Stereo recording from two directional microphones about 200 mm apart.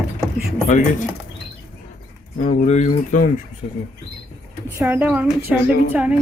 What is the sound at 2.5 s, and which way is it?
Speech, 35° left (ahead or behind).